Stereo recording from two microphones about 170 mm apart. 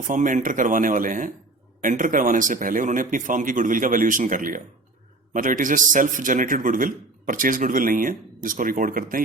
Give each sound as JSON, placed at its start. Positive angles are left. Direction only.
{"t": 0.1, "sound": "a man's voice", "side_deg": -50}